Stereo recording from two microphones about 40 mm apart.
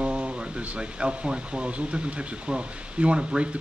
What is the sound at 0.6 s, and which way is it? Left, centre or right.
Speech, right.